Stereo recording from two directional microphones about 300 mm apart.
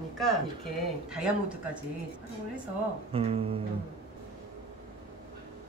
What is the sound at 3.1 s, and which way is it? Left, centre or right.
Speech, centre.